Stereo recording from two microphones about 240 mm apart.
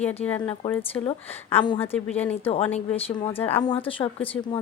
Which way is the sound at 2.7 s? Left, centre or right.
Left.